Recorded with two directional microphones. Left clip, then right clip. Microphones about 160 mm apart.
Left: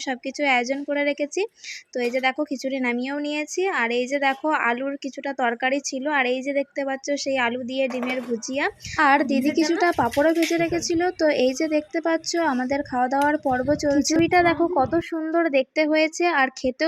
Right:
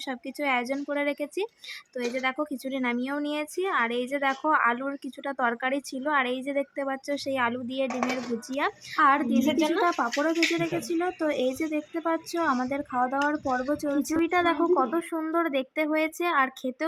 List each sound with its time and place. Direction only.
0.1 s speech: 10° left (ahead or behind)
9.0 s a woman's voice: 25° left (ahead or behind)